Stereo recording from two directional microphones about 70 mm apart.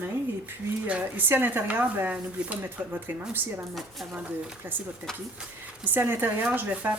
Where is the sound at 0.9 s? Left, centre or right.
Right.